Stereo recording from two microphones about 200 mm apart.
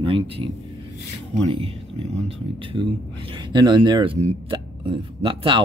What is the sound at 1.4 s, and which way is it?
Speech, 30° right (ahead or behind).